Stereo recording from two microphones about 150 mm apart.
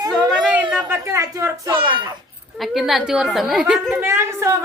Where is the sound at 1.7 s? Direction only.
30° right (ahead or behind).